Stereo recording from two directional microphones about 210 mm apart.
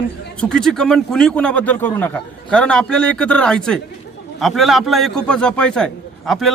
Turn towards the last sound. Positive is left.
turn(degrees=0)  # may be behind; listen again after turning